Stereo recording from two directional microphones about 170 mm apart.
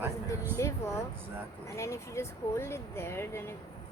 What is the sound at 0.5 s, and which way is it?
Speech, 15° left (ahead or behind).